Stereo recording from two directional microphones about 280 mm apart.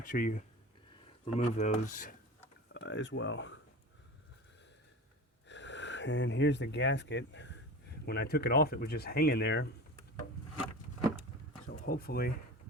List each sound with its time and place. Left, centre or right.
0.0 s speech: left
2.7 s speech: left
5.5 s speech: left
11.6 s speech: left